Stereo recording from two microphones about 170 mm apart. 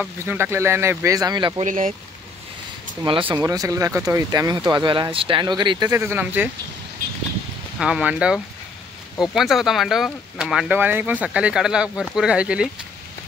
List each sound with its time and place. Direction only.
0.2 s speech: 15° right (ahead or behind)
1.6 s speech: 50° right (ahead or behind)
3.3 s speech: 20° right (ahead or behind)
7.8 s speech: 5° right (ahead or behind)